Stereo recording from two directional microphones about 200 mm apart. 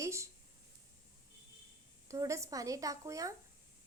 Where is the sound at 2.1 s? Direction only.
15° right (ahead or behind).